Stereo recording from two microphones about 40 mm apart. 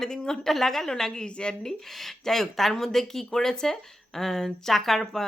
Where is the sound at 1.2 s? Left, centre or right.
Left.